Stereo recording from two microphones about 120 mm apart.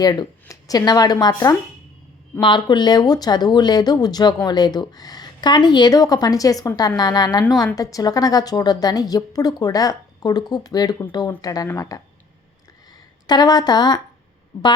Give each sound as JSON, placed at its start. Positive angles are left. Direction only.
{"t": 0.0, "sound": "a woman's voice", "side_deg": 35}